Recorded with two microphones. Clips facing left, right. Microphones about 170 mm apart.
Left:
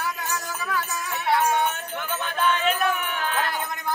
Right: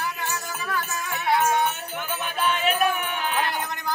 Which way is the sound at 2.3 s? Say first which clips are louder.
Even; 15° right (ahead or behind).